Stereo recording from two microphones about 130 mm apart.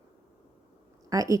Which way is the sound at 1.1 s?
25° right (ahead or behind).